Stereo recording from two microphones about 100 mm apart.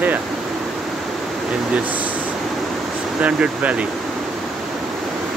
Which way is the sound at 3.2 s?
15° right (ahead or behind).